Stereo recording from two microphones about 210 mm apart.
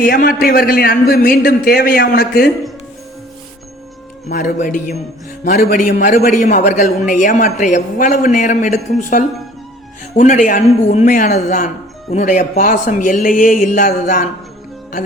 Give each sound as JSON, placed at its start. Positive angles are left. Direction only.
{"t": 0.0, "sound": "a man's voice", "side_deg": 45}
{"t": 4.3, "sound": "a man's voice", "side_deg": 40}
{"t": 5.5, "sound": "a man's voice", "side_deg": 45}